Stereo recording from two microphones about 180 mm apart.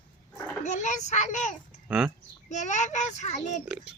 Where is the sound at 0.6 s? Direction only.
40° left (ahead or behind).